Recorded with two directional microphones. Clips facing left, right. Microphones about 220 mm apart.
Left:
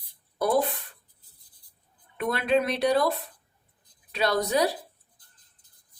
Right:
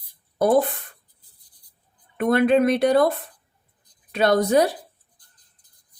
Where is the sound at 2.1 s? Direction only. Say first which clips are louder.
Right 7 dB; 50° right (ahead or behind).